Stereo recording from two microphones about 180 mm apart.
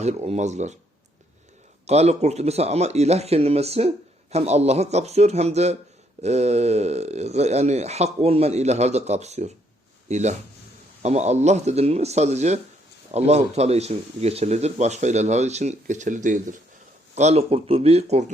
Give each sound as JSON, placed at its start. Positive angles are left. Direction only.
{"t": 0.0, "sound": "speech", "side_deg": -40}
{"t": 1.9, "sound": "speech", "side_deg": -35}